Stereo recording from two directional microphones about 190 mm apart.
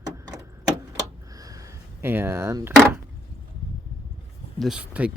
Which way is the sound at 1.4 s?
20° right (ahead or behind).